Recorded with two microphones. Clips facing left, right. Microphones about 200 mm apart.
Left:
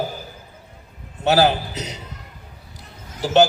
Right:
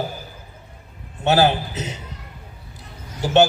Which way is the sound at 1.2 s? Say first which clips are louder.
Even; 40° left (ahead or behind).